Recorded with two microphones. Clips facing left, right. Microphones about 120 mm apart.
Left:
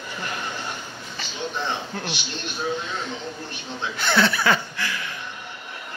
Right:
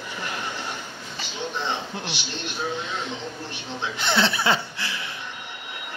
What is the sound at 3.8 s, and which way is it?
Speech, 25° right (ahead or behind).